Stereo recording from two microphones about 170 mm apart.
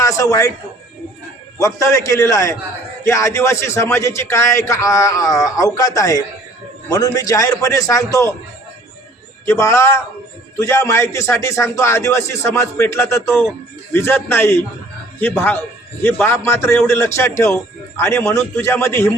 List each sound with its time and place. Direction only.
0.0 s a man's voice: 20° left (ahead or behind)
1.5 s a man's voice: 20° left (ahead or behind)
9.5 s a man's voice: 15° left (ahead or behind)